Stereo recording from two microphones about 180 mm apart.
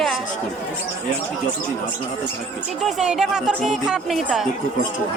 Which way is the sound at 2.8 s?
5° right (ahead or behind).